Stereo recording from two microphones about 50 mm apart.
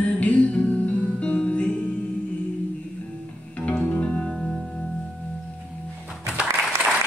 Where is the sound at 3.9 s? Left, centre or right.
Left.